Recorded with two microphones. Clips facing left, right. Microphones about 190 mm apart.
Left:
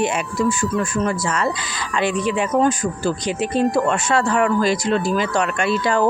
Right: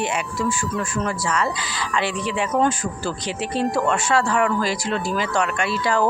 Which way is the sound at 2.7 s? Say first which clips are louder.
Left 5 dB; 15° left (ahead or behind).